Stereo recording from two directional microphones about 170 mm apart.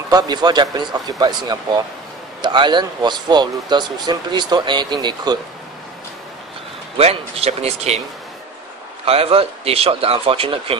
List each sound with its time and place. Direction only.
0.1 s speech: 25° right (ahead or behind)
7.0 s speech: 35° right (ahead or behind)
9.0 s speech: 35° right (ahead or behind)